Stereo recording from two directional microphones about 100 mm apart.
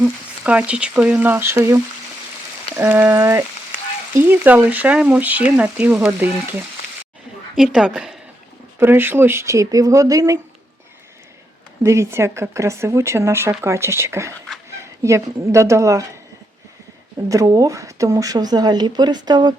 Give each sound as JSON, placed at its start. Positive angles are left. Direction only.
{"t": 0.0, "sound": "speech", "side_deg": -10}
{"t": 2.8, "sound": "speech", "side_deg": -15}
{"t": 3.1, "sound": "speech", "side_deg": -25}
{"t": 7.5, "sound": "a woman's voice", "side_deg": -5}
{"t": 8.8, "sound": "speech", "side_deg": -20}
{"t": 11.8, "sound": "speech", "side_deg": -30}
{"t": 17.2, "sound": "speech", "side_deg": -35}